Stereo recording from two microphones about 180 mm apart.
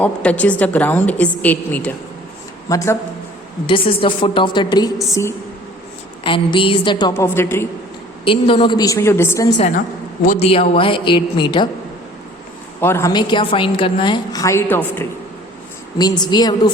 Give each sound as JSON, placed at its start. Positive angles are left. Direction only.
{"t": 0.0, "sound": "a woman's voice", "side_deg": 10}
{"t": 3.7, "sound": "a woman's voice", "side_deg": 30}
{"t": 6.2, "sound": "a woman's voice", "side_deg": 30}
{"t": 7.1, "sound": "a woman's voice", "side_deg": 15}
{"t": 8.2, "sound": "a woman's voice", "side_deg": 30}
{"t": 10.2, "sound": "a woman's voice", "side_deg": 35}
{"t": 12.8, "sound": "a woman's voice", "side_deg": 15}
{"t": 16.0, "sound": "a woman's voice", "side_deg": 20}